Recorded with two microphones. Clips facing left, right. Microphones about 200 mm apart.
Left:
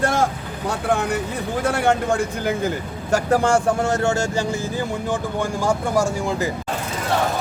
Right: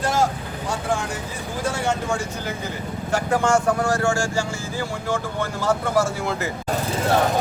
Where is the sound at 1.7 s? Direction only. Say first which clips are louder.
Left 5 dB; 60° left (ahead or behind).